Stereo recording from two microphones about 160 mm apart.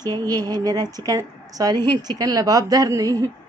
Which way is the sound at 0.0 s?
25° right (ahead or behind).